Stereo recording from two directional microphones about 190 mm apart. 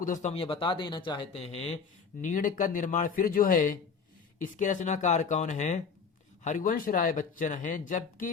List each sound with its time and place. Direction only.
0.0 s speech: 40° left (ahead or behind)
2.2 s speech: 45° left (ahead or behind)